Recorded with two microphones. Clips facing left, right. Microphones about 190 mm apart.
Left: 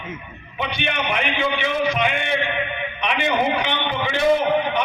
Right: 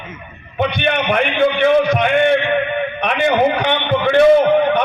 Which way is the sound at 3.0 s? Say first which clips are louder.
Right 6 dB; 50° right (ahead or behind).